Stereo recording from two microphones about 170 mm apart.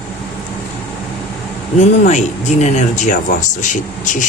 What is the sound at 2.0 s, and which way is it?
Speech, 45° left (ahead or behind).